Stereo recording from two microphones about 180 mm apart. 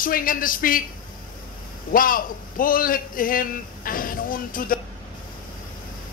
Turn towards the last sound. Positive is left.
turn(degrees=50)  # may be behind; listen again after turning